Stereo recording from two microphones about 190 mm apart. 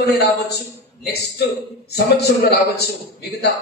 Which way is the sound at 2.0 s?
60° left (ahead or behind).